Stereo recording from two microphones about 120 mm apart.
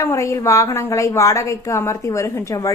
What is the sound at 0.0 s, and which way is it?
A woman's voice, 25° left (ahead or behind).